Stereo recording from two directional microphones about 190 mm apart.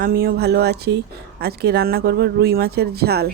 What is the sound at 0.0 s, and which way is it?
Speech, 50° right (ahead or behind).